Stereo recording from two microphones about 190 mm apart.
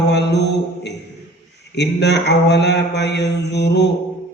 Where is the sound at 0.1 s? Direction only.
65° left (ahead or behind).